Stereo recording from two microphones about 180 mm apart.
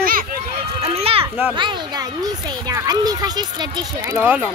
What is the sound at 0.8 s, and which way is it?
A child's voice, 35° right (ahead or behind).